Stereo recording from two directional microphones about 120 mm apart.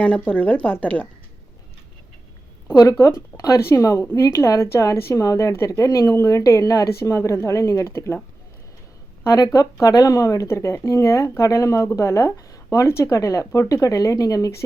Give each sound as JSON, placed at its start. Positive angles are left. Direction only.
{"t": 0.0, "sound": "speech", "side_deg": 10}
{"t": 3.0, "sound": "speech", "side_deg": 30}
{"t": 9.2, "sound": "speech", "side_deg": 25}